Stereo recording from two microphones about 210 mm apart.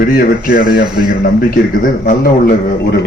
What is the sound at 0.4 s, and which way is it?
A man's voice, 45° left (ahead or behind).